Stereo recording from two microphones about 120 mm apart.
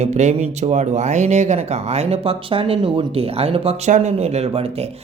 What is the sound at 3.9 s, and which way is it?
Speech, 65° right (ahead or behind).